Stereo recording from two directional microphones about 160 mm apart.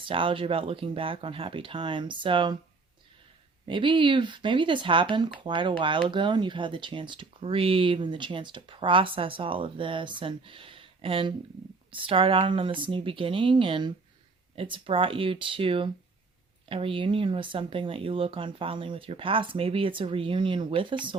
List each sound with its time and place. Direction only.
0.0 s speech: 35° right (ahead or behind)
3.7 s speech: 30° right (ahead or behind)